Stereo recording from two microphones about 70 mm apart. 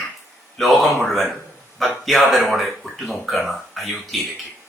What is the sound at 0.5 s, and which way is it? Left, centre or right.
Speech, centre.